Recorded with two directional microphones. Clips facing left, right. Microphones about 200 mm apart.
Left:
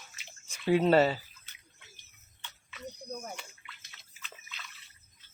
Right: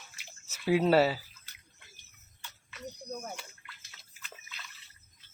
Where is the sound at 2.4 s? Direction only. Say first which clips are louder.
Even; centre (ahead or behind).